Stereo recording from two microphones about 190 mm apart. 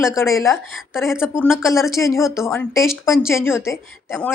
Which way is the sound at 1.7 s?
Centre (ahead or behind).